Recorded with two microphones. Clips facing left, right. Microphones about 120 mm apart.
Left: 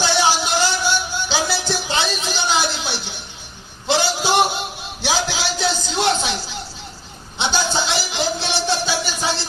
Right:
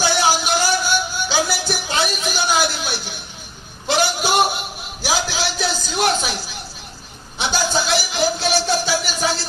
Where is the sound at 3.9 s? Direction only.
20° left (ahead or behind).